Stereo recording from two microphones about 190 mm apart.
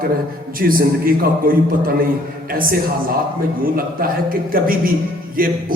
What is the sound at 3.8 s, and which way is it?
Speech, 50° right (ahead or behind).